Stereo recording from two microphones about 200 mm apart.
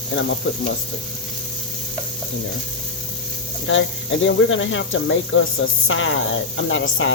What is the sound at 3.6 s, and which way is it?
Speech, 75° left (ahead or behind).